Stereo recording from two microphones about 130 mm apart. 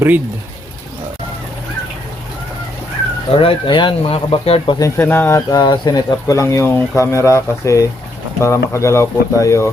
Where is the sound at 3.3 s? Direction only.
45° left (ahead or behind).